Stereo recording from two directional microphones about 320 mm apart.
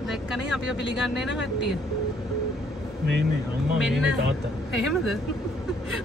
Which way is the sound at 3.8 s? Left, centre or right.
Centre.